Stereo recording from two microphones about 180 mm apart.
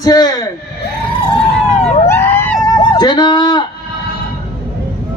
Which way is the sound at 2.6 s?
20° left (ahead or behind).